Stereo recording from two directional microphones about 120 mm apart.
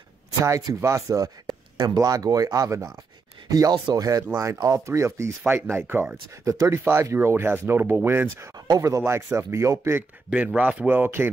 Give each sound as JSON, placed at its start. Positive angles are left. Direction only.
{"t": 0.4, "sound": "speech", "side_deg": -30}
{"t": 8.6, "sound": "speech", "side_deg": -30}
{"t": 10.3, "sound": "speech", "side_deg": -10}